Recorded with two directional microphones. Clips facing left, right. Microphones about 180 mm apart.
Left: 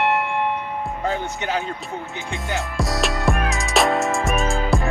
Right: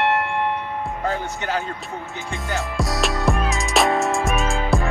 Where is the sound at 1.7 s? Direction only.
Centre (ahead or behind).